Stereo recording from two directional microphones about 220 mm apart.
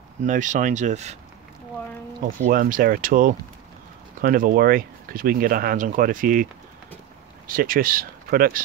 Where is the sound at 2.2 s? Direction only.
40° right (ahead or behind).